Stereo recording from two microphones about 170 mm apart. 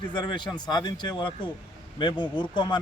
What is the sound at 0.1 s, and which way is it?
Speech, 25° left (ahead or behind).